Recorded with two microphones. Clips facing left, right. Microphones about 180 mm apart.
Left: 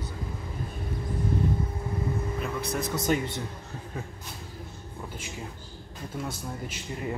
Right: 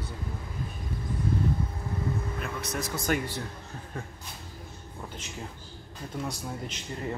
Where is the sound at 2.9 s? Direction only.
25° left (ahead or behind).